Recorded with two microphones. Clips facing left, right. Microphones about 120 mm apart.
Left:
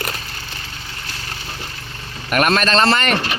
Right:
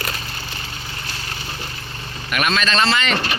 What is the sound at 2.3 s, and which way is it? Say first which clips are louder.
Speech: left 4 dB; 45° left (ahead or behind).